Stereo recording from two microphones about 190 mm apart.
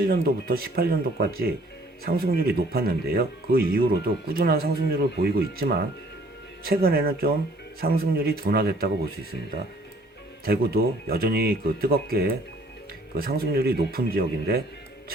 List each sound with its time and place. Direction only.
0.1 s speech: 50° right (ahead or behind)
10.4 s speech: 55° right (ahead or behind)